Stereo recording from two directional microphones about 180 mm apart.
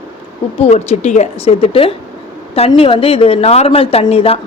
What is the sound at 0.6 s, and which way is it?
A woman's voice, 35° left (ahead or behind).